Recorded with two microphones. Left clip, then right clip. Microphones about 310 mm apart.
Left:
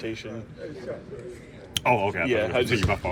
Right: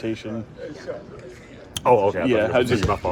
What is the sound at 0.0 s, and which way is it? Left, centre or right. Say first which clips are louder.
Speech: right 5 dB; right.